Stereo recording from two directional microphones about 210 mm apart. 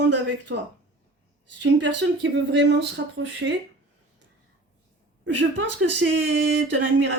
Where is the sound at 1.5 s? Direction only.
60° right (ahead or behind).